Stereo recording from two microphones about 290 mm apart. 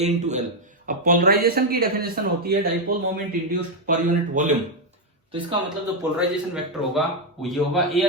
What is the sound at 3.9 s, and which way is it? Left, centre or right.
Speech, right.